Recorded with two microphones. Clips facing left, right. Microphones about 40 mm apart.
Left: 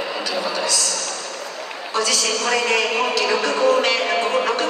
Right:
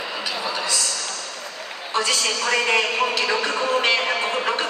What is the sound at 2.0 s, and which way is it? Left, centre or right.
A man's voice, right.